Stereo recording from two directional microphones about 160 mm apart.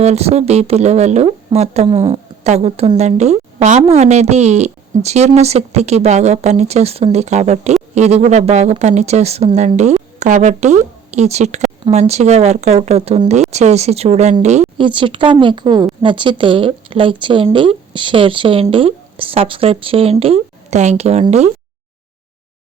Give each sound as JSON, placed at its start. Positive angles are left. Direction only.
{"t": 0.0, "sound": "speech", "side_deg": -40}
{"t": 14.8, "sound": "speech", "side_deg": -30}